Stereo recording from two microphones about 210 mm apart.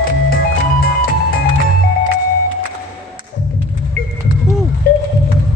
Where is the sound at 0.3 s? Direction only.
45° left (ahead or behind).